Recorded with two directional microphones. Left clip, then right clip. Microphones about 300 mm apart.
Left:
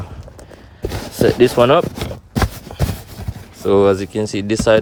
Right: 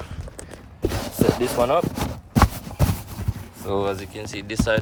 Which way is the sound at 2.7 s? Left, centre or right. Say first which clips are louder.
Left 2 dB; left.